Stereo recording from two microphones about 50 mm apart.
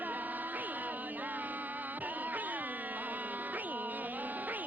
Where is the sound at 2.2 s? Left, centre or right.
Right.